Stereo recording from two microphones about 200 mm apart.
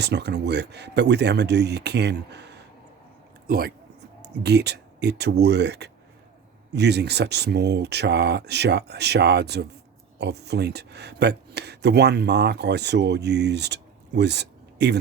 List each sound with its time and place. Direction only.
0.0 s speech: 60° right (ahead or behind)